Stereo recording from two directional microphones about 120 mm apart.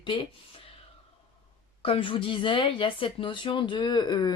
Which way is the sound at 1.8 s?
45° left (ahead or behind).